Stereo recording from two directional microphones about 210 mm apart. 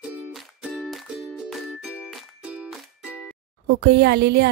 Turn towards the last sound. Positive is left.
turn(degrees=-50)  # may be behind; listen again after turning